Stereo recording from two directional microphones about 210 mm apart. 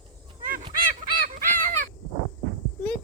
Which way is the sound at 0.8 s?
40° right (ahead or behind).